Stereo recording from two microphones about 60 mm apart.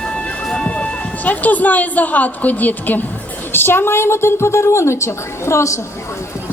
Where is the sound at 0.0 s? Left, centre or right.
Centre.